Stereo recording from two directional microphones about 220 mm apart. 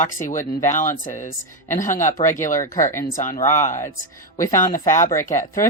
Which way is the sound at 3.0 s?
40° left (ahead or behind).